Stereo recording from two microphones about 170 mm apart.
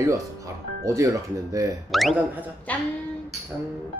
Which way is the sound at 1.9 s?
Centre (ahead or behind).